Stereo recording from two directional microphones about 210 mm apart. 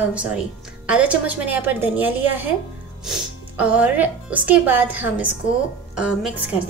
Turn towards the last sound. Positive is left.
turn(degrees=-5)  # may be behind; listen again after turning